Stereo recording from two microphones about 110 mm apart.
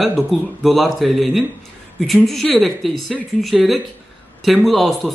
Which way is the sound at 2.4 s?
Centre (ahead or behind).